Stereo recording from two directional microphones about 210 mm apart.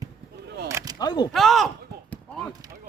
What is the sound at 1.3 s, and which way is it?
Basketball bounce, centre (ahead or behind).